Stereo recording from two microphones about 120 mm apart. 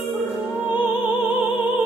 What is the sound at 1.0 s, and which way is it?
Music, 45° left (ahead or behind).